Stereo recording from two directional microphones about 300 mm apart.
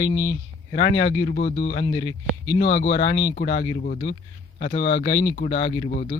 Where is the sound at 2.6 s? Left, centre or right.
Left.